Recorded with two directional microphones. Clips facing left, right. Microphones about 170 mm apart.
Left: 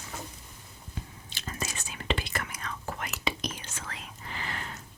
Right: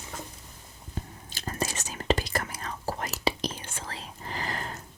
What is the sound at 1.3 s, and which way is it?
Whispering, 40° right (ahead or behind).